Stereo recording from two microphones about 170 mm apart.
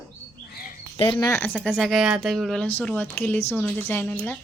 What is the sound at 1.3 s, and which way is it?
Speech, 15° left (ahead or behind).